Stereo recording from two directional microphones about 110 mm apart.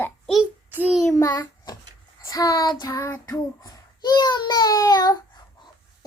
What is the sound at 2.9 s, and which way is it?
Child singing, 25° left (ahead or behind).